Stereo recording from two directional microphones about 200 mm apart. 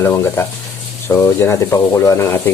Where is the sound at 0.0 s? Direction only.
10° left (ahead or behind).